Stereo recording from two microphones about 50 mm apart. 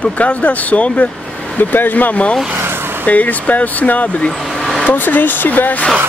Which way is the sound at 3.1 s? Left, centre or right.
Left.